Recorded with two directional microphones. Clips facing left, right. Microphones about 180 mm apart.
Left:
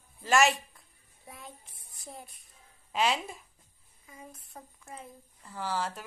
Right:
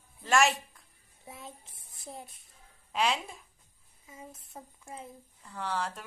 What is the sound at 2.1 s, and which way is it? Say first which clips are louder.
Music: right 2 dB; 25° right (ahead or behind).